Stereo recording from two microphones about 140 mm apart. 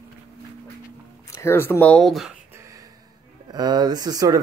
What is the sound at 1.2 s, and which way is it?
Speech, 20° left (ahead or behind).